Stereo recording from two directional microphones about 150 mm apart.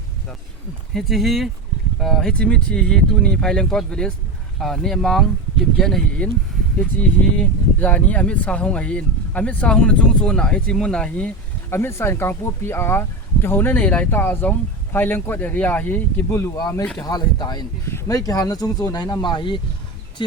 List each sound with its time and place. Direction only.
0.9 s speech: centre (ahead or behind)
11.7 s speech: 15° left (ahead or behind); by 19.5 s 30° left (ahead or behind)